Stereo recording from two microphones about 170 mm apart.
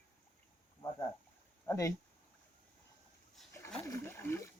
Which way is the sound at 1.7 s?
20° left (ahead or behind).